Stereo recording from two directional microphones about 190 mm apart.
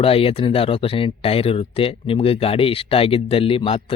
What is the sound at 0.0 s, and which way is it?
Speech, 30° left (ahead or behind).